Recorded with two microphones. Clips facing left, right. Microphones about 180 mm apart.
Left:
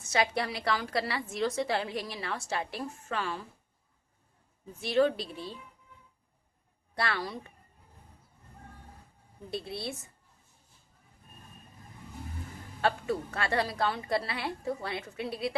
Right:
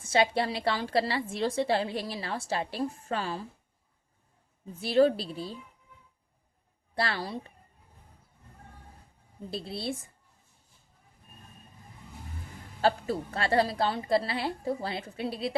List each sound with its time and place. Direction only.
0.0 s a woman's voice: 30° right (ahead or behind)
4.7 s a woman's voice: 30° right (ahead or behind)
6.9 s a woman's voice: 30° right (ahead or behind)
9.5 s a woman's voice: 25° right (ahead or behind)
12.8 s a woman's voice: 30° right (ahead or behind)